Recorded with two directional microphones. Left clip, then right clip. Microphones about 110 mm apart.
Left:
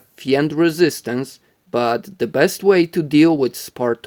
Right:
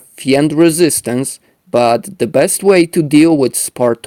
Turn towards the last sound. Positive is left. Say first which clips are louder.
# right 7 dB
turn(degrees=-45)  # may be behind; listen again after turning